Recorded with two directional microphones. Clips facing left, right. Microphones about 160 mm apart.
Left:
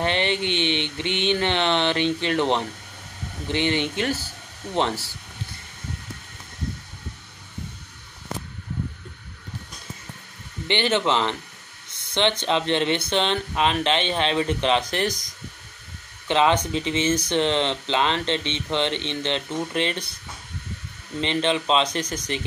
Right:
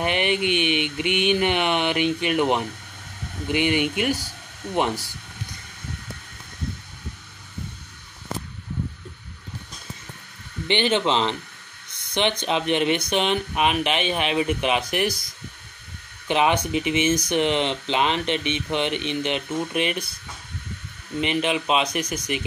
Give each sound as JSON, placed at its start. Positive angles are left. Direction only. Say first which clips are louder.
{"t": 0.0, "sound": "speech", "louder": "right 1 dB", "side_deg": -15}
{"t": 10.7, "sound": "speech", "louder": "right 1 dB", "side_deg": -15}
{"t": 16.3, "sound": "speech", "louder": "left 1 dB", "side_deg": -15}
{"t": 21.2, "sound": "speech", "louder": "even", "side_deg": -10}